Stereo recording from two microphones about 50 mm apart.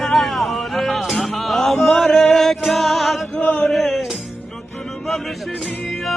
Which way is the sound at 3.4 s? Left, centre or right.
Left.